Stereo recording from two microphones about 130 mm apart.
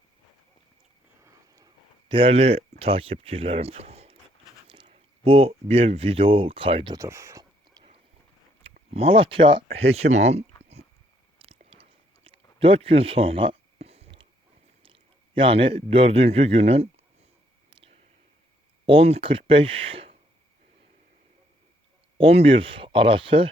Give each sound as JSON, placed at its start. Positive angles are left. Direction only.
{"t": 1.2, "sound": "a sound", "side_deg": -25}
{"t": 2.0, "sound": "speech", "side_deg": -40}
{"t": 4.7, "sound": "speech", "side_deg": -40}
{"t": 6.9, "sound": "a sound", "side_deg": -25}
{"t": 8.9, "sound": "speech", "side_deg": -45}
{"t": 11.3, "sound": "chewing", "side_deg": -45}
{"t": 15.4, "sound": "speech", "side_deg": -40}
{"t": 17.7, "sound": "a sound", "side_deg": -40}
{"t": 18.9, "sound": "speech", "side_deg": -50}
{"t": 22.2, "sound": "speech", "side_deg": -50}